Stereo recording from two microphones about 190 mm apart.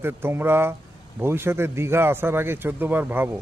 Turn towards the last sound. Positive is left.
turn(degrees=-10)  # may be behind; listen again after turning